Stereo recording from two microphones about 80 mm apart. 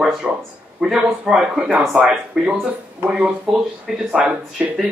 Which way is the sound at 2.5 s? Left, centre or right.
Centre.